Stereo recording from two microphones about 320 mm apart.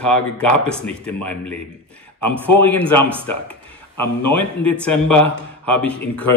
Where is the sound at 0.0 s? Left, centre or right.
Centre.